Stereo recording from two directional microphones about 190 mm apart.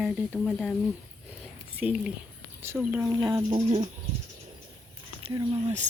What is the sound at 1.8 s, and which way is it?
Speech, 5° right (ahead or behind).